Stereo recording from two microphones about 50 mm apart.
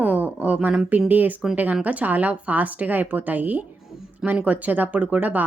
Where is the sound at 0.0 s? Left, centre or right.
Right.